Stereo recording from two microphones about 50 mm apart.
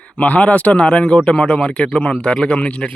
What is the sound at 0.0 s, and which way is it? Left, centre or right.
A man's voice, left.